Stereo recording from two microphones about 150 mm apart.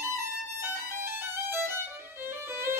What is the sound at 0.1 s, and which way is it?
Violin, 15° right (ahead or behind).